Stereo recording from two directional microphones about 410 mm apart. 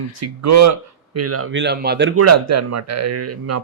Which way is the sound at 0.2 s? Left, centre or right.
Right.